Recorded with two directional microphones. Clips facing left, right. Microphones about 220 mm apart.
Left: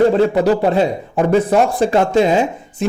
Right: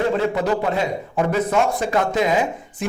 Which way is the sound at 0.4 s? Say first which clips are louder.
Left 7 dB; 30° left (ahead or behind).